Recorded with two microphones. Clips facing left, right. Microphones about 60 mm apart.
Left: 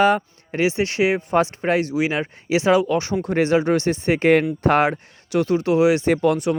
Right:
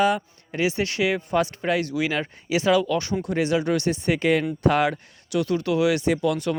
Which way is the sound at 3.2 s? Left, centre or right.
Left.